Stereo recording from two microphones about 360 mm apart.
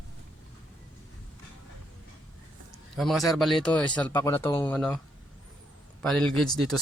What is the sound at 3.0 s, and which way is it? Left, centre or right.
Speech, centre.